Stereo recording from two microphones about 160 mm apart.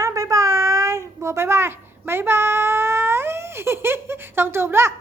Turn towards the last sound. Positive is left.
turn(degrees=-15)  # may be behind; listen again after turning